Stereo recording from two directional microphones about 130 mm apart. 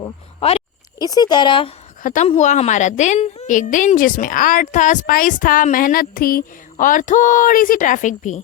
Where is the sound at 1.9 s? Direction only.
90° left.